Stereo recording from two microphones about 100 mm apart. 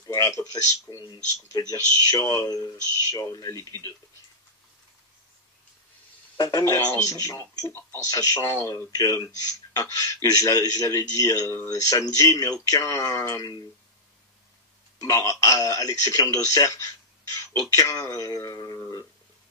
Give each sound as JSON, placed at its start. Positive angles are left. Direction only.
{"t": 0.0, "sound": "a sound", "side_deg": 35}
{"t": 0.4, "sound": "speech", "side_deg": 35}
{"t": 6.3, "sound": "speech", "side_deg": 45}
{"t": 15.1, "sound": "speech", "side_deg": 30}